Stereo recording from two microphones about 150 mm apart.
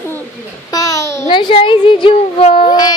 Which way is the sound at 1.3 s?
35° left (ahead or behind).